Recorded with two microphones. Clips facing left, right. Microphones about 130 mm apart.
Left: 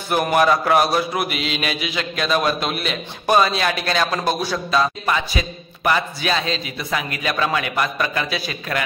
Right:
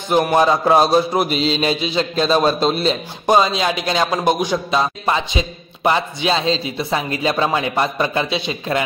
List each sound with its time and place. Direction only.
0.3 s a man's voice: 25° right (ahead or behind)
3.3 s a man's voice: 20° right (ahead or behind)